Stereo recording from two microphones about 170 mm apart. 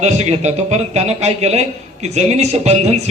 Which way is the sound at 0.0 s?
40° right (ahead or behind).